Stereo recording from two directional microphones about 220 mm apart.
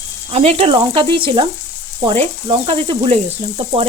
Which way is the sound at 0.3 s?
25° right (ahead or behind).